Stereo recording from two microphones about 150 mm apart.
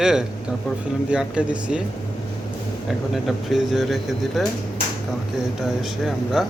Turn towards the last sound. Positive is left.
turn(degrees=0)  # may be behind; listen again after turning